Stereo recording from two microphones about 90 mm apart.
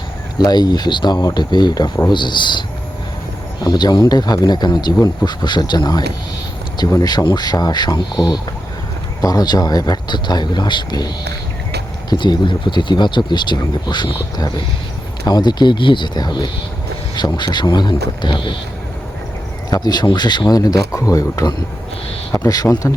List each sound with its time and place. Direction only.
0.3 s speech: 50° left (ahead or behind)
12.1 s speech: 60° left (ahead or behind)
19.7 s speech: 50° left (ahead or behind)